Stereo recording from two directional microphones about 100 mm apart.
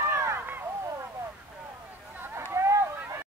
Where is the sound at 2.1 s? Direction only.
20° right (ahead or behind).